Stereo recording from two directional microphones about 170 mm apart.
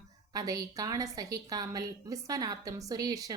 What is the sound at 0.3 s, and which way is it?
A woman's voice, 20° right (ahead or behind).